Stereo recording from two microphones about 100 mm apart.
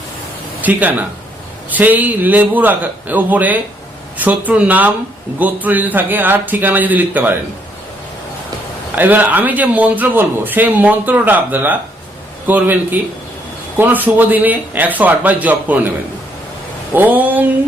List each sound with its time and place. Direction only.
0.6 s speech: 15° right (ahead or behind)
9.0 s speech: 15° right (ahead or behind)
16.9 s speech: 20° right (ahead or behind)